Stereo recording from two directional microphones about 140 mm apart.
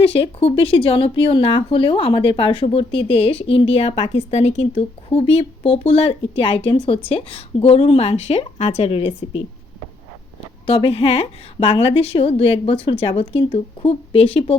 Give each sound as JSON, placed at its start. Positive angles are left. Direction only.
{"t": 0.0, "sound": "speech", "side_deg": 40}
{"t": 10.7, "sound": "speech", "side_deg": 40}